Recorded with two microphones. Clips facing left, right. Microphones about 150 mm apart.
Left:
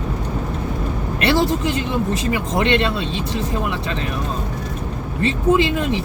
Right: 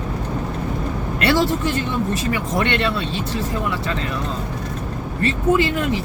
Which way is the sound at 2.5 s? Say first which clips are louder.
Left 3 dB; 20° left (ahead or behind).